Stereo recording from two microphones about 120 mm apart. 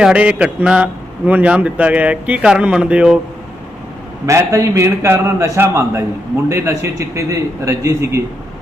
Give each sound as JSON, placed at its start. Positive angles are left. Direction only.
{"t": 0.0, "sound": "a man's voice", "side_deg": -10}
{"t": 4.3, "sound": "a man's voice", "side_deg": -25}